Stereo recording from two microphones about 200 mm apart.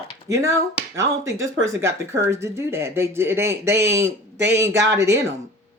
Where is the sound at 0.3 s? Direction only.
15° right (ahead or behind).